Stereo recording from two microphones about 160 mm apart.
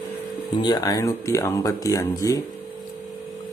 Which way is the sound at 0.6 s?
25° left (ahead or behind).